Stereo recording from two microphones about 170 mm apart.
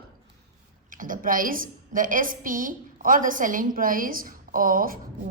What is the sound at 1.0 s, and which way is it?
A woman's voice, 50° right (ahead or behind).